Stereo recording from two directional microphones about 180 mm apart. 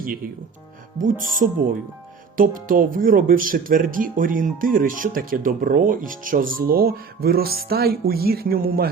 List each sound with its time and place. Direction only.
0.9 s speech: 50° right (ahead or behind)